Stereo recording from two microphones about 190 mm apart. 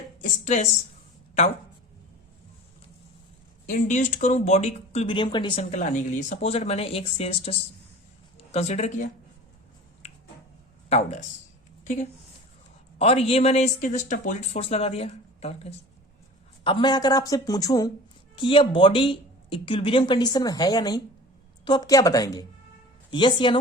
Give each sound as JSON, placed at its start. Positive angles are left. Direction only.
{"t": 0.2, "sound": "speech", "side_deg": 40}
{"t": 3.7, "sound": "speech", "side_deg": 40}
{"t": 5.7, "sound": "speech", "side_deg": 40}
{"t": 8.5, "sound": "speech", "side_deg": 35}
{"t": 10.8, "sound": "speech", "side_deg": 35}
{"t": 13.0, "sound": "speech", "side_deg": 30}
{"t": 16.6, "sound": "speech", "side_deg": 20}